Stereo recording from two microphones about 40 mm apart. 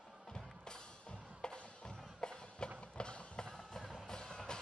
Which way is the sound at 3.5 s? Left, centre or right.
Centre.